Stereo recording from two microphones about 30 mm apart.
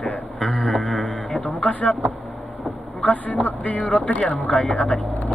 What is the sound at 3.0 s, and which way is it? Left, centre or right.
Speech, left.